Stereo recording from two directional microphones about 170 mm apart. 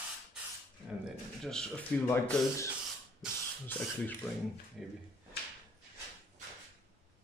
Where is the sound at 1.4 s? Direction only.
5° left (ahead or behind).